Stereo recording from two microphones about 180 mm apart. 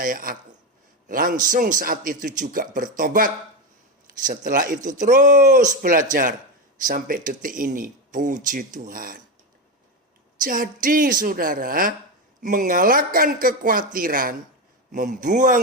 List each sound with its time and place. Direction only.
0.0 s speech: 50° right (ahead or behind)
10.4 s speech: 50° right (ahead or behind)